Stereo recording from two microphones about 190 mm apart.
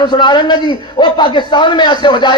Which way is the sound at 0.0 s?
25° left (ahead or behind).